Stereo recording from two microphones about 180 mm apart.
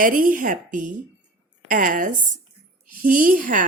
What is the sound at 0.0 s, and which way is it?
Speech, 50° right (ahead or behind).